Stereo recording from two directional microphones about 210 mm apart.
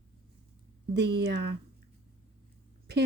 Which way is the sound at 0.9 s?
55° right (ahead or behind).